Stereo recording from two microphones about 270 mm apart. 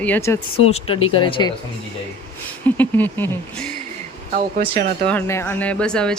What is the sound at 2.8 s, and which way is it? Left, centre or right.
Speech, centre.